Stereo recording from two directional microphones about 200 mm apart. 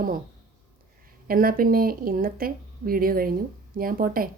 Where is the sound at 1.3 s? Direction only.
45° right (ahead or behind).